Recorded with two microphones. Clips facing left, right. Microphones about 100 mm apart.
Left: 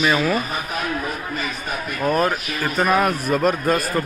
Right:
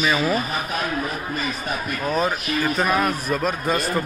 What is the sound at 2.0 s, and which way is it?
Speech, 10° left (ahead or behind).